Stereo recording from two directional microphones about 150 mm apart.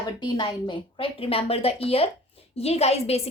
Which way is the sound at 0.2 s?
30° left (ahead or behind).